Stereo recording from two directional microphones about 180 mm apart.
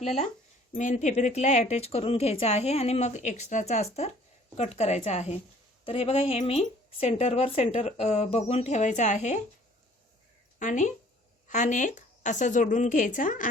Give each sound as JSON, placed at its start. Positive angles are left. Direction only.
{"t": 0.7, "sound": "speech", "side_deg": 45}
{"t": 10.6, "sound": "speech", "side_deg": 45}